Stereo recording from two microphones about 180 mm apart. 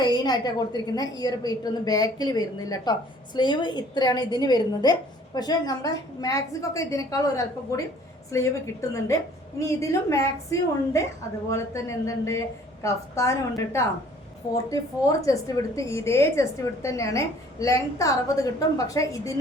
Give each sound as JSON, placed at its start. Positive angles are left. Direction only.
{"t": 0.0, "sound": "a sound", "side_deg": 25}
{"t": 0.9, "sound": "a woman's voice", "side_deg": 20}
{"t": 15.2, "sound": "a woman's voice", "side_deg": 20}